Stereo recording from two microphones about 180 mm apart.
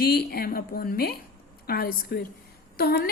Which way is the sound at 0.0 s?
60° left (ahead or behind).